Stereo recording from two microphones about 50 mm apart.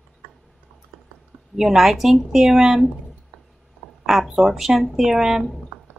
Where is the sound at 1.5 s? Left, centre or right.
Centre.